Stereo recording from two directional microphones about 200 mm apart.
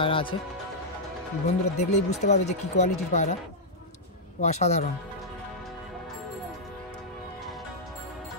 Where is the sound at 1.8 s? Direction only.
35° left (ahead or behind).